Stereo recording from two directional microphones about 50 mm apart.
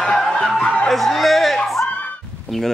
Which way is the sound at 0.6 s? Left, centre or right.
Centre.